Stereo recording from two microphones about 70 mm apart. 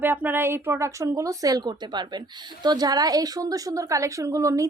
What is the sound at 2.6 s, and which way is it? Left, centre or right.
A woman's voice, right.